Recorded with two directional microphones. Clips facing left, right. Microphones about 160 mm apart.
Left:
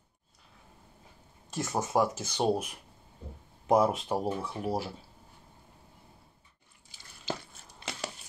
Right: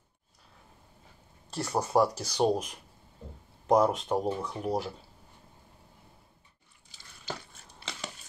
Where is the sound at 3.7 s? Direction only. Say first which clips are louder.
Right 1 dB; 5° left (ahead or behind).